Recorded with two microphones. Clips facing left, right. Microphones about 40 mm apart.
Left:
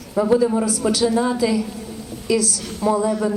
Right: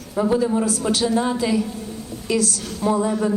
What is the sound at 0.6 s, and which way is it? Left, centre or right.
A man's voice, right.